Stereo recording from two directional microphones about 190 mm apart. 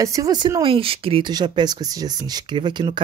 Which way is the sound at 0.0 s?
15° right (ahead or behind).